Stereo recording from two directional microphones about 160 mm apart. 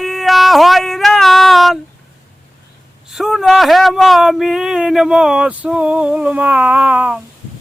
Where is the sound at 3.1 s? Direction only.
Centre (ahead or behind).